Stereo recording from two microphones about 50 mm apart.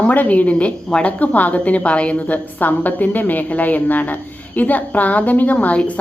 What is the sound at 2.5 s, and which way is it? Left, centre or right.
A woman's voice, left.